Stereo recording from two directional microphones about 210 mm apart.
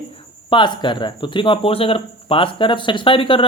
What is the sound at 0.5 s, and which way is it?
Speech, 20° left (ahead or behind).